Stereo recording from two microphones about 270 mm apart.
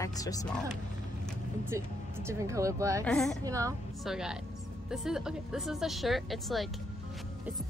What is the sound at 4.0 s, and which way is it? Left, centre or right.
A woman's voice, centre.